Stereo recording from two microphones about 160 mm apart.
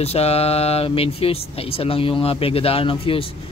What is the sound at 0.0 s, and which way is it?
Speech, 40° left (ahead or behind).